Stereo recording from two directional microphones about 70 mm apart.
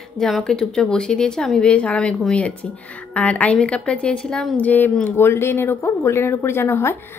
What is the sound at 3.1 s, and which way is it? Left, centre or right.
A woman's voice, centre.